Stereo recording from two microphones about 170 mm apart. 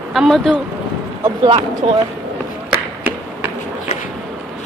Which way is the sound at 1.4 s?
30° right (ahead or behind).